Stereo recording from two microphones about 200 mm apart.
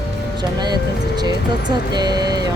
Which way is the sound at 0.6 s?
20° right (ahead or behind).